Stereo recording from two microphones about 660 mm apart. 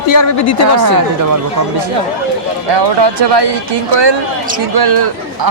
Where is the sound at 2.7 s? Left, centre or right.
Right.